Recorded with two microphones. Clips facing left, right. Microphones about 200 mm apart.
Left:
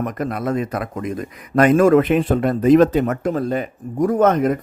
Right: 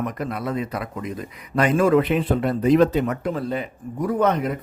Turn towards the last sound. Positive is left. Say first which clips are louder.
# left 5 dB
turn(degrees=45)  # may be behind; listen again after turning